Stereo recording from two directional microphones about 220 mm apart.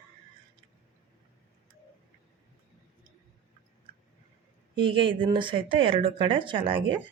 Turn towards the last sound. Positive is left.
turn(degrees=-25)  # may be behind; listen again after turning